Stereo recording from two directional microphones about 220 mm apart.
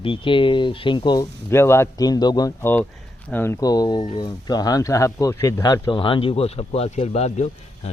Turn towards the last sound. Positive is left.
turn(degrees=30)  # may be behind; listen again after turning